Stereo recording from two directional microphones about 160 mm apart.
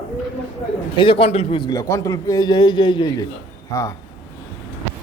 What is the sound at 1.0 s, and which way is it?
A man's voice, 35° left (ahead or behind).